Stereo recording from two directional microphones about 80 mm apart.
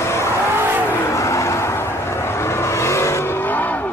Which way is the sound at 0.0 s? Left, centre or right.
Left.